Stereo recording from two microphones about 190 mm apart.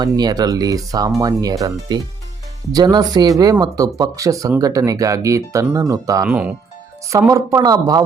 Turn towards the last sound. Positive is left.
turn(degrees=-20)  # may be behind; listen again after turning